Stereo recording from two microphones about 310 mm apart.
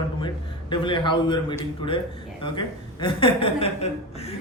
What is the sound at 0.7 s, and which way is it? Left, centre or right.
A woman's voice, centre.